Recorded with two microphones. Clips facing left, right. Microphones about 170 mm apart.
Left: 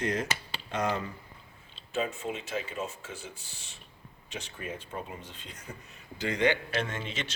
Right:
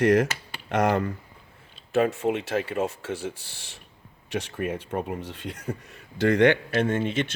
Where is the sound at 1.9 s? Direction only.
75° right (ahead or behind); by 7.3 s 55° right (ahead or behind).